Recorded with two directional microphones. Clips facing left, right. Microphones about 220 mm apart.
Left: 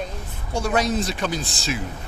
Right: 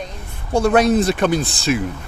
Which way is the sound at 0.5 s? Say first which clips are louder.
Right 8 dB; 60° right (ahead or behind).